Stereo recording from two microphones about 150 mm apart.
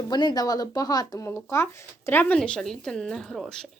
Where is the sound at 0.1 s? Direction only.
30° left (ahead or behind); by 3.7 s 5° left (ahead or behind).